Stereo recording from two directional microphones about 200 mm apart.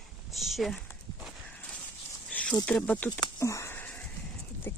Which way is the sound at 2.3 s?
5° left (ahead or behind).